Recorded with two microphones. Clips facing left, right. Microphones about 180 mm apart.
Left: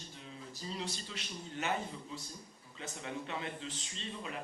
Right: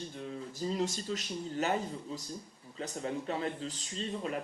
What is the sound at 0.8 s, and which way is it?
Speech, 45° right (ahead or behind).